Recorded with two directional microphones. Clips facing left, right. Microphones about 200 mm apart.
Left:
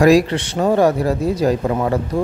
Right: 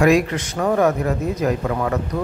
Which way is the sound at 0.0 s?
35° left (ahead or behind).